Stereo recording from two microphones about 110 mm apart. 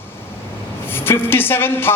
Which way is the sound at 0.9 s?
20° left (ahead or behind).